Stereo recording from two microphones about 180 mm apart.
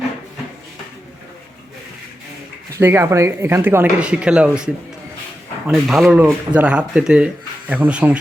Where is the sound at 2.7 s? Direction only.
15° right (ahead or behind).